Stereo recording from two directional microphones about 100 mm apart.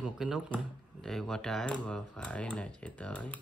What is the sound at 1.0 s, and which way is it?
Speech, 5° left (ahead or behind).